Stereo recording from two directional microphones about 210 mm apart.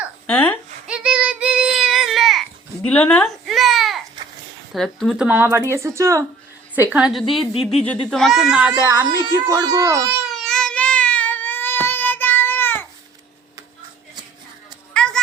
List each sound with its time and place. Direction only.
0.3 s a woman's voice: 5° left (ahead or behind)
0.9 s child singing: 5° right (ahead or behind)
4.7 s speech: centre (ahead or behind); by 6.2 s 15° right (ahead or behind)
6.9 s a woman's voice: centre (ahead or behind)
8.9 s a child's voice: 20° right (ahead or behind)
10.4 s child singing: 5° left (ahead or behind)
14.9 s a sound: 5° left (ahead or behind)